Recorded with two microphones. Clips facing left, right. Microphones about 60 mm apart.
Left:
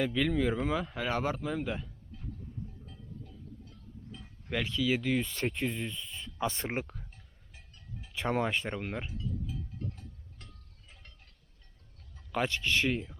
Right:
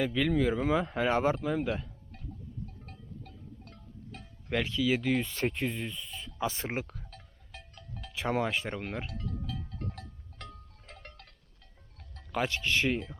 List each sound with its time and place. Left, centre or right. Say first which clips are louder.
0.0 s speech: right 1 dB; centre
0.6 s speech: right 4 dB; centre
2.8 s cowbell: right 1 dB; right
4.4 s speech: right 2 dB; centre
7.1 s a sound: right 8 dB; right
8.1 s speech: even; centre
9.0 s livestock: even; right
10.8 s a sound: right 8 dB; right
12.5 s speech: right 1 dB; centre